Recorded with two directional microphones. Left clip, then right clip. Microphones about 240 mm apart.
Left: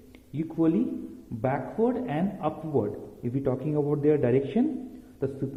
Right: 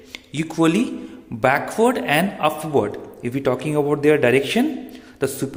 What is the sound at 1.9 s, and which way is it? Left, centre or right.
A man's voice, centre.